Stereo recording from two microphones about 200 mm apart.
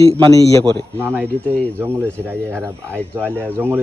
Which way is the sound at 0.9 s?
10° right (ahead or behind).